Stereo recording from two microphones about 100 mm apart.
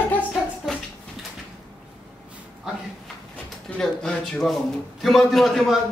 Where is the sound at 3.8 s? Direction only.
5° left (ahead or behind).